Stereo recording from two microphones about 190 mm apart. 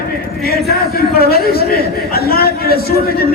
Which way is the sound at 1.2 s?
55° left (ahead or behind).